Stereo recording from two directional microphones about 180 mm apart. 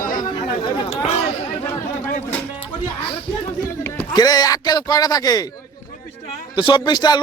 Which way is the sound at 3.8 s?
10° left (ahead or behind).